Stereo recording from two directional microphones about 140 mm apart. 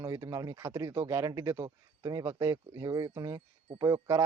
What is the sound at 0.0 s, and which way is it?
Speech, 20° right (ahead or behind).